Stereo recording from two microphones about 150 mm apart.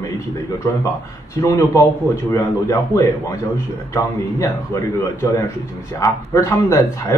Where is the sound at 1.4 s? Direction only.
20° left (ahead or behind).